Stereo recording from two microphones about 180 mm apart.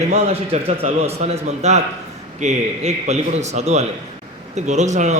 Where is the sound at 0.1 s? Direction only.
35° right (ahead or behind).